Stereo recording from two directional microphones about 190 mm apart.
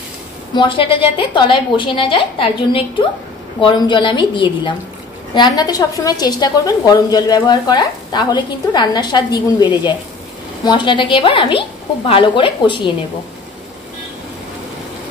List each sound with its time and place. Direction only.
0.6 s a woman's voice: 25° left (ahead or behind)